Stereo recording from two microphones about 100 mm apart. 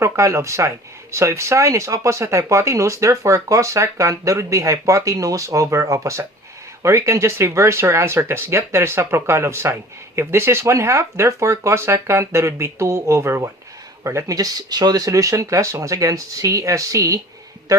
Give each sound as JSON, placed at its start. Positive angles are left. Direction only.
{"t": 0.0, "sound": "speech", "side_deg": -30}